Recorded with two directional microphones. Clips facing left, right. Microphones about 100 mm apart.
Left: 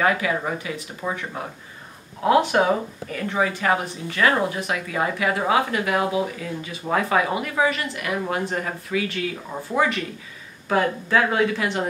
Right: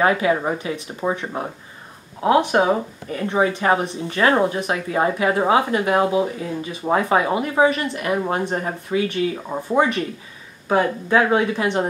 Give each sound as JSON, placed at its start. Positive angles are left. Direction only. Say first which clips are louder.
{"t": 0.0, "sound": "speech", "louder": "right 4 dB", "side_deg": -30}